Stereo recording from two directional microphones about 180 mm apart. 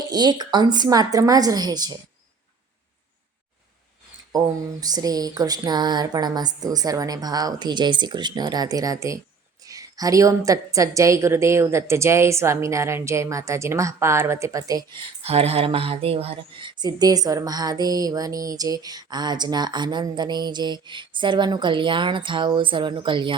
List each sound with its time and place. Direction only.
0.1 s speech: 25° right (ahead or behind)
4.3 s a woman's voice: 20° right (ahead or behind)
15.2 s speech: 35° right (ahead or behind)